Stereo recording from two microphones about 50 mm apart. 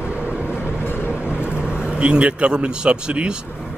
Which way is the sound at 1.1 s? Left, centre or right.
Right.